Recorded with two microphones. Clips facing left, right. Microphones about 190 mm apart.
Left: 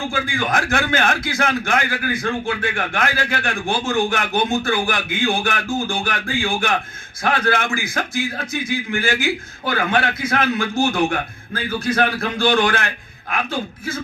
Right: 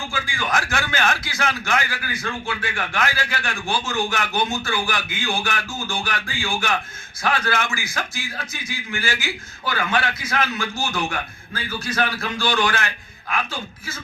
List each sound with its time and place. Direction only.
0.1 s a man's voice: 55° left (ahead or behind)